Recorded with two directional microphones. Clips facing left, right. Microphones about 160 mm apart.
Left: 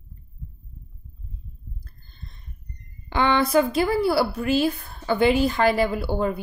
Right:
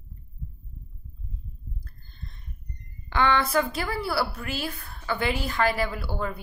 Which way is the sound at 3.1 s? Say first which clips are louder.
Left 4 dB; 20° left (ahead or behind).